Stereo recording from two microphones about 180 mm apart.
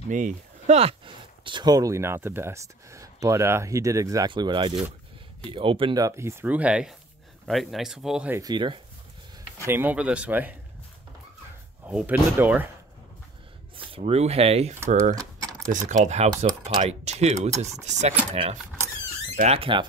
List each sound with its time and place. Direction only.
0.1 s speech: 45° right (ahead or behind); by 8.4 s 5° right (ahead or behind)
8.4 s speech: 25° right (ahead or behind)
9.7 s speech: 10° right (ahead or behind)
11.8 s speech: 10° right (ahead or behind)
13.7 s speech: 30° right (ahead or behind)
15.1 s mechanisms: 20° right (ahead or behind)
15.7 s speech: 45° right (ahead or behind)